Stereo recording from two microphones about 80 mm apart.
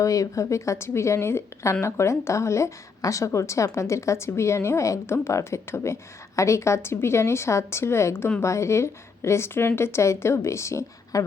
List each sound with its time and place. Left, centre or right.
0.0 s a woman's voice: left